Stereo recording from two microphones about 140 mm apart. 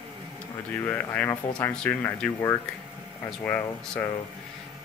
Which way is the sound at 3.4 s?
10° left (ahead or behind).